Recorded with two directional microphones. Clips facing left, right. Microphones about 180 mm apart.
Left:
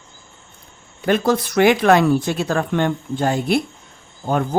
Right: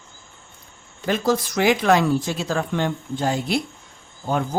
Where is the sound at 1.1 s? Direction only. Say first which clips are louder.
Left 3 dB; 60° left (ahead or behind).